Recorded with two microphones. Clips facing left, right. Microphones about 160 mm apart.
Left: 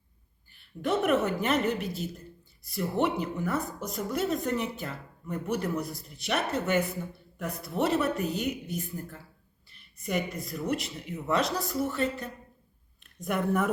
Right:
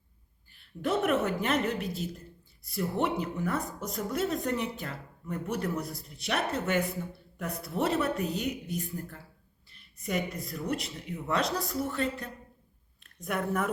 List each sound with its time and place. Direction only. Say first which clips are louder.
0.5 s speech: left 1 dB; centre (ahead or behind)